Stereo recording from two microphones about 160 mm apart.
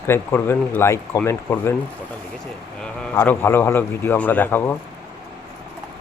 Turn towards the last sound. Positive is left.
turn(degrees=10)  # may be behind; listen again after turning